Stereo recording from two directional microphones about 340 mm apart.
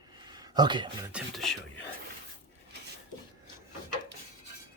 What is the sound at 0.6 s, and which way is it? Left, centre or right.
Speech, centre.